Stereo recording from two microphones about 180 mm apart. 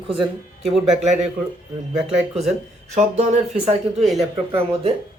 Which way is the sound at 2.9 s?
40° right (ahead or behind).